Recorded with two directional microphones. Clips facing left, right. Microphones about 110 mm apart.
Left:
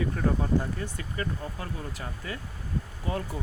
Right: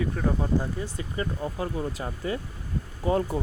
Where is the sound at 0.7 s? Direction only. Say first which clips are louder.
Right 3 dB; 25° right (ahead or behind).